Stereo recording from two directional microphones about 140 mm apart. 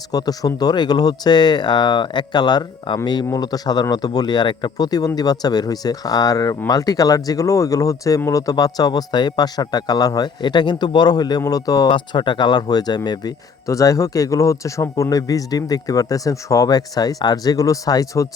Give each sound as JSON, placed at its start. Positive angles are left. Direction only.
{"t": 0.1, "sound": "speech", "side_deg": 25}